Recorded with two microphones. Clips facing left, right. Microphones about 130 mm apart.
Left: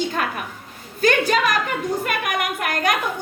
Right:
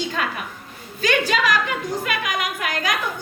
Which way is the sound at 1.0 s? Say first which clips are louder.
Left 2 dB; 50° left (ahead or behind).